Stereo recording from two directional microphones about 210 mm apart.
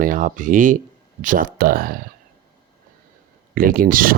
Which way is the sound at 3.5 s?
45° right (ahead or behind).